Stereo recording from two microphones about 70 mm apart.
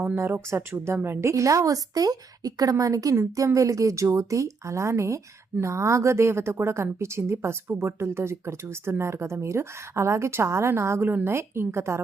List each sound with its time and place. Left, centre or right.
0.5 s a woman's voice: right